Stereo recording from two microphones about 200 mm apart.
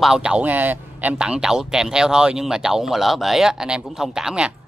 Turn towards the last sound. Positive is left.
turn(degrees=-5)  # may be behind; listen again after turning